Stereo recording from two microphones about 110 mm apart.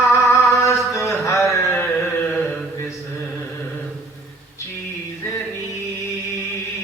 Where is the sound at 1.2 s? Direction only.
25° left (ahead or behind).